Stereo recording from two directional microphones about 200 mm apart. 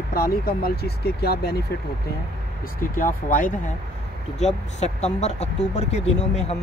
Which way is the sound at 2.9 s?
45° left (ahead or behind).